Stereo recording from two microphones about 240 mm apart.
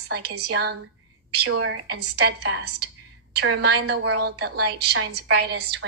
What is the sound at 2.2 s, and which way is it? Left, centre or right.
A woman's voice, right.